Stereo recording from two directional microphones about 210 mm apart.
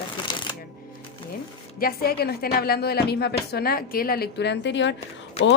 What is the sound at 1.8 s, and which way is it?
A woman's voice, 45° left (ahead or behind).